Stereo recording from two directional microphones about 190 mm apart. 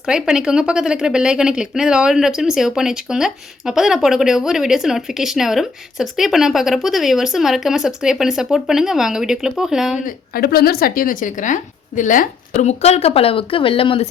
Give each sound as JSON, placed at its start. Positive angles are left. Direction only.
{"t": 0.0, "sound": "a woman's voice", "side_deg": -5}
{"t": 10.1, "sound": "speech", "side_deg": 50}